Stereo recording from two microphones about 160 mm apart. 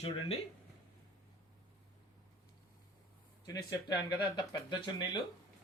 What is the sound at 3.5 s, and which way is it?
Speech, 25° left (ahead or behind).